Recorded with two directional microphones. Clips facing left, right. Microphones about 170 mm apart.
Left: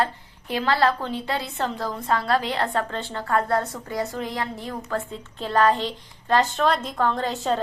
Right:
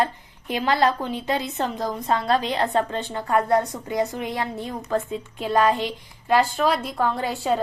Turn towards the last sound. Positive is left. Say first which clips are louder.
# right 1 dB
turn(degrees=-10)  # may be behind; listen again after turning